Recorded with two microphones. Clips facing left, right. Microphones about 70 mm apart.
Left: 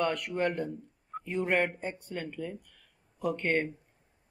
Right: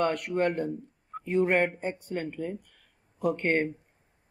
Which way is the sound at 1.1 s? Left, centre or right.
Centre.